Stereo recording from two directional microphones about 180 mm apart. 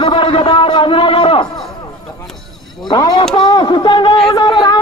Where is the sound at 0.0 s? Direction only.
30° left (ahead or behind).